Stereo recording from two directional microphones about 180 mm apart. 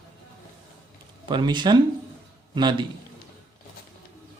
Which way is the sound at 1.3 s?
25° right (ahead or behind).